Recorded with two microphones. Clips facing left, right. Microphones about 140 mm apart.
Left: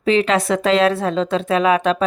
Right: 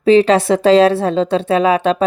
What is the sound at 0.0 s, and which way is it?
A woman's voice, 35° right (ahead or behind).